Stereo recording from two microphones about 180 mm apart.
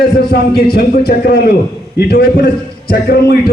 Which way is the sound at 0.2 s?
60° left (ahead or behind).